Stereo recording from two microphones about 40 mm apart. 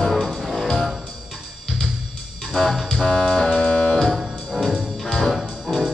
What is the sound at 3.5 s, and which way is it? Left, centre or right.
Music, centre.